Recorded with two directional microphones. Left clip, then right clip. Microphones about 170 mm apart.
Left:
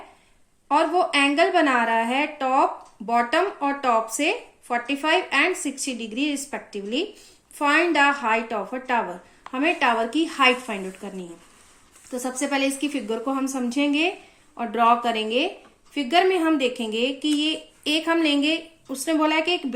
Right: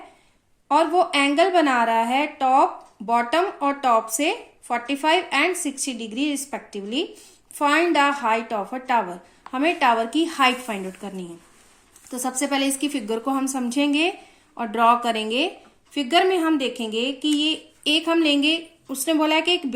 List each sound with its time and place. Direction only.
0.7 s speech: 20° right (ahead or behind)